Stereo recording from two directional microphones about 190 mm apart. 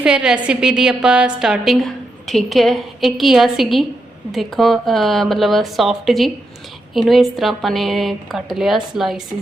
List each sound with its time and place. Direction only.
0.0 s a woman's voice: 5° right (ahead or behind)